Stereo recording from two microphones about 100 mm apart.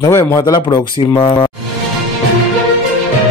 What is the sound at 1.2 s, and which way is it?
Speech, 55° left (ahead or behind).